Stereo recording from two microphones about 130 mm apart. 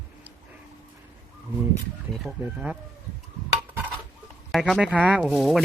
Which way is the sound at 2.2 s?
5° right (ahead or behind).